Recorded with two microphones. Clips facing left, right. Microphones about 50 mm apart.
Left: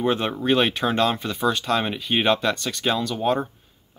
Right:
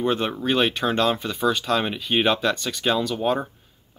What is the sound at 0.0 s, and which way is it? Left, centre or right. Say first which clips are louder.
Speech: left 1 dB; centre.